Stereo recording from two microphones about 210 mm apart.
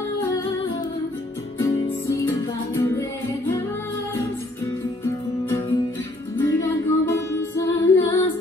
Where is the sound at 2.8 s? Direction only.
15° left (ahead or behind).